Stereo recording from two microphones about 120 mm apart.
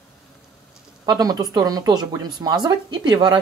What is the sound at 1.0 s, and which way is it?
Speech, 35° right (ahead or behind).